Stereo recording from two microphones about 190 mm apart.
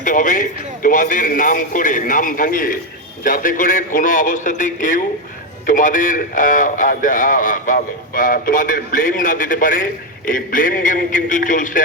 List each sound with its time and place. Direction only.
0.0 s a man's voice: 45° left (ahead or behind)